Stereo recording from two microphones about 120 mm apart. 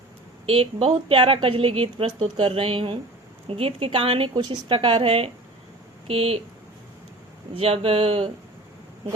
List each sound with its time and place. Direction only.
0.4 s a woman's voice: 50° right (ahead or behind)
7.5 s a woman's voice: 50° right (ahead or behind)